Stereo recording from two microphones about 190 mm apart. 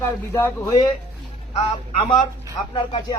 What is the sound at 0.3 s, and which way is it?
Music, 15° left (ahead or behind).